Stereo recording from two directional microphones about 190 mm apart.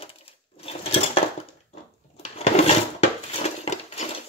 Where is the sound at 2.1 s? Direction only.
35° left (ahead or behind).